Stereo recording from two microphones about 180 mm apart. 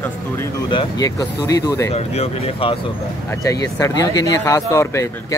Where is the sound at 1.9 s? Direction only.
35° left (ahead or behind).